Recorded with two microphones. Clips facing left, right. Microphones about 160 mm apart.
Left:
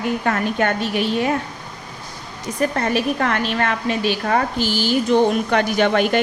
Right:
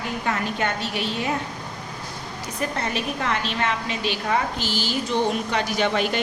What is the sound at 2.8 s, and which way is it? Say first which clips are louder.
A woman's voice: left 7 dB; 50° left (ahead or behind).